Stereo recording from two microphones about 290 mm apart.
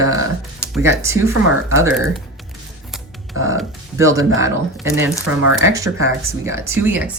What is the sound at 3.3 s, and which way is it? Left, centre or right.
Music, right.